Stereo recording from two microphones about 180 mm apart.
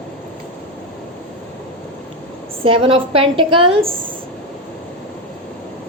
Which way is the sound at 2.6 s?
30° right (ahead or behind).